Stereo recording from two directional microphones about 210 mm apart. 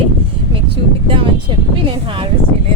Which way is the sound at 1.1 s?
25° right (ahead or behind).